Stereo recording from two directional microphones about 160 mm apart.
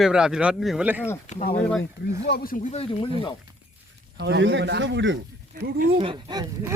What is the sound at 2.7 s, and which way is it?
Speech, 35° left (ahead or behind).